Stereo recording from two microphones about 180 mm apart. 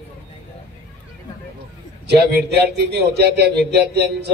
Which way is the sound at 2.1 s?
65° right (ahead or behind).